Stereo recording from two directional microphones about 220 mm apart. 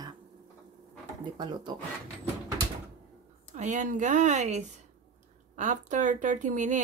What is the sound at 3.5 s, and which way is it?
Speech, 35° right (ahead or behind).